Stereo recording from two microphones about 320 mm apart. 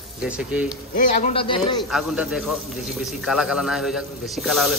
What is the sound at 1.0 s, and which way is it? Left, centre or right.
Speech, centre.